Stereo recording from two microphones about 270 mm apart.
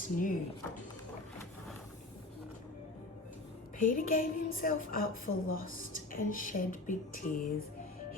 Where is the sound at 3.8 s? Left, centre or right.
Left.